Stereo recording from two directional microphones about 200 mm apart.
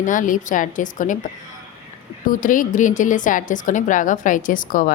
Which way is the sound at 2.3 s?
40° left (ahead or behind).